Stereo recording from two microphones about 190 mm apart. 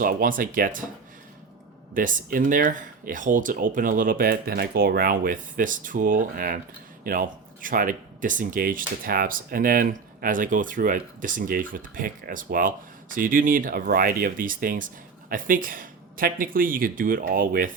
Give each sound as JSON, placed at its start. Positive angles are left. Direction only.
{"t": 0.0, "sound": "speech", "side_deg": -45}
{"t": 1.9, "sound": "speech", "side_deg": -45}